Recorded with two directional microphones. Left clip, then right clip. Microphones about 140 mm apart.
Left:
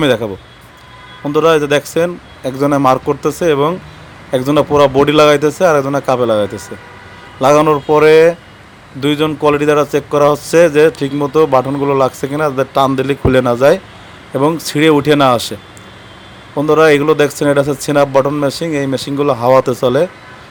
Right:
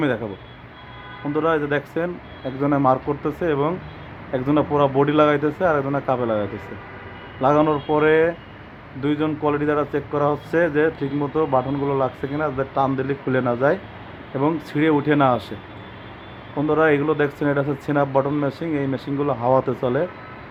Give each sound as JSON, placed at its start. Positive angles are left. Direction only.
{"t": 0.0, "sound": "speech", "side_deg": 60}
{"t": 1.3, "sound": "speech", "side_deg": 60}
{"t": 16.6, "sound": "speech", "side_deg": 55}